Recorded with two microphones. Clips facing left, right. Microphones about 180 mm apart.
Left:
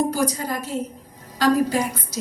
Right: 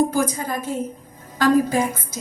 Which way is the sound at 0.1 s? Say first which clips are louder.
Right 1 dB; 50° right (ahead or behind).